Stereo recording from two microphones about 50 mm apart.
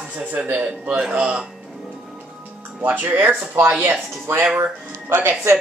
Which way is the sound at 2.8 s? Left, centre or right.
Right.